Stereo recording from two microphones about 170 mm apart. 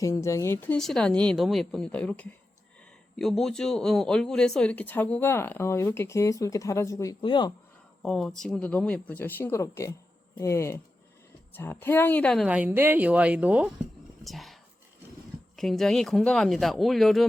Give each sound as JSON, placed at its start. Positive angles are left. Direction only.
{"t": 0.0, "sound": "speech", "side_deg": 15}
{"t": 0.8, "sound": "speech", "side_deg": 5}
{"t": 8.0, "sound": "speech", "side_deg": 5}
{"t": 12.5, "sound": "a woman's voice", "side_deg": -10}